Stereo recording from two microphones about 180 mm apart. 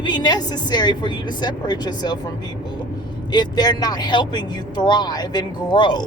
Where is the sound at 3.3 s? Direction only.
25° left (ahead or behind).